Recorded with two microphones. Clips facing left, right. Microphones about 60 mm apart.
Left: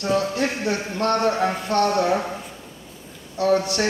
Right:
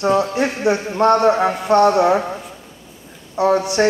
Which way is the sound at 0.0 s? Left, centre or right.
Right.